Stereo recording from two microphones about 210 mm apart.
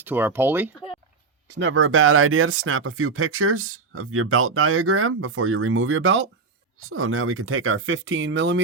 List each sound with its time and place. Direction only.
0.0 s speech: 10° right (ahead or behind)
1.5 s speech: 60° right (ahead or behind)
6.7 s speech: 80° right; by 8.6 s 60° right (ahead or behind)